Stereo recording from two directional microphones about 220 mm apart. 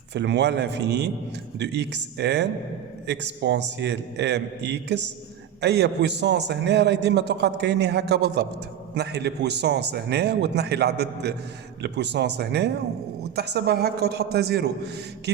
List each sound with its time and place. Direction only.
0.1 s a man's voice: 50° right (ahead or behind)